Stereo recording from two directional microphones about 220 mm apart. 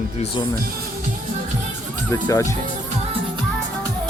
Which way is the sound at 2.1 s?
15° left (ahead or behind).